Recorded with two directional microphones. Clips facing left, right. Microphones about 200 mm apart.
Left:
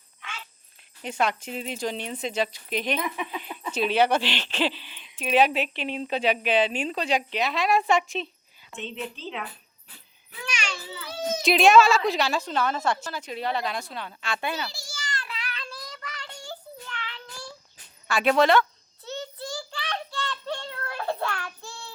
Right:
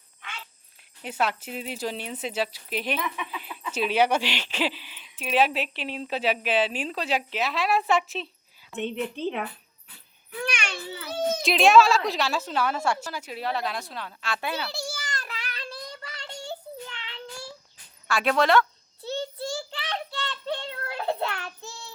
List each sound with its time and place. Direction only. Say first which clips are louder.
1.0 s speech: left 1 dB; 5° right (ahead or behind)
8.7 s a woman's voice: right 5 dB; 60° right (ahead or behind)
10.4 s a sound: right 2 dB; 60° right (ahead or behind)
11.4 s speech: left 1 dB; centre (ahead or behind)
14.7 s child singing: right 4 dB; 55° right (ahead or behind); by 17.2 s 25° right (ahead or behind)
18.1 s speech: left 2 dB; centre (ahead or behind)
19.0 s child singing: right 4 dB; 30° right (ahead or behind)